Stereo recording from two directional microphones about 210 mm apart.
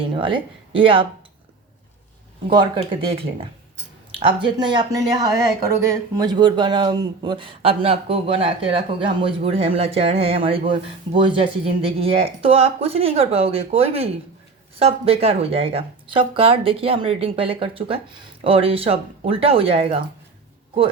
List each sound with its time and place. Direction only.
0.0 s speech: 25° right (ahead or behind)
2.5 s speech: 20° right (ahead or behind)